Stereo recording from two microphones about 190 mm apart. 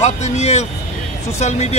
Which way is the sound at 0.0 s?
35° left (ahead or behind).